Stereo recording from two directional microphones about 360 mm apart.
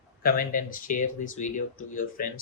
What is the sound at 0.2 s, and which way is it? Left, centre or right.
Speech, left.